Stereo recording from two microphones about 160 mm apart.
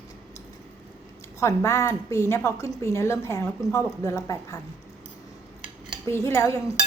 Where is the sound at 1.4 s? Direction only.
20° left (ahead or behind).